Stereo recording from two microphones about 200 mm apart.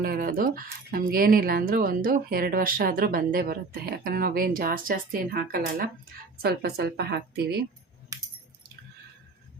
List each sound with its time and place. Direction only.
0.0 s speech: 45° right (ahead or behind)